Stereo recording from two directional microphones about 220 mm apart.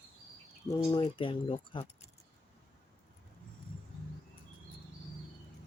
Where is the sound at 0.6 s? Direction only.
15° left (ahead or behind).